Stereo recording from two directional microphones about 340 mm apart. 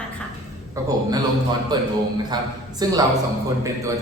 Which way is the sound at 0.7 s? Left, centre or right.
Centre.